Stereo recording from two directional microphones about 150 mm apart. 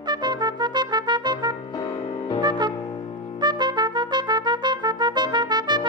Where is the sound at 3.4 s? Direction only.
30° right (ahead or behind).